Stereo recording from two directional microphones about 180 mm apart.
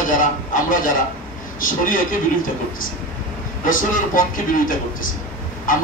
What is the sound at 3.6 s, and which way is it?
A man's voice, 50° left (ahead or behind).